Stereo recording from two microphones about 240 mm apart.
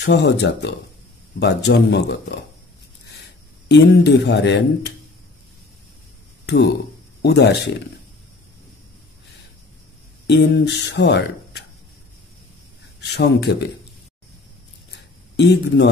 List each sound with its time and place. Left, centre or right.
0.0 s speech: left
6.4 s speech: left
10.2 s speech: left
13.0 s speech: left
14.9 s a sound: left